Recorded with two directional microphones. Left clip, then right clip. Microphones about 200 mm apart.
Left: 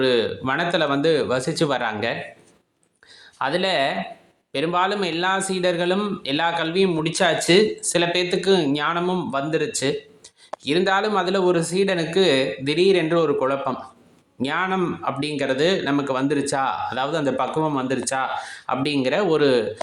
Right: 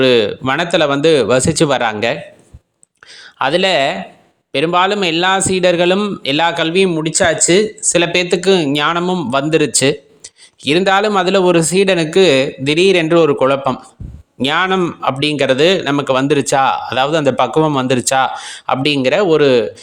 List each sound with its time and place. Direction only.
0.0 s speech: 40° right (ahead or behind)
3.3 s speech: 40° right (ahead or behind)
6.9 s speech: 25° right (ahead or behind)